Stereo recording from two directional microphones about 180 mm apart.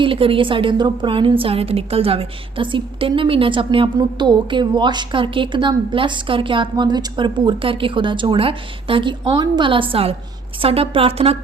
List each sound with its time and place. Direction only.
0.0 s a woman's voice: 30° right (ahead or behind)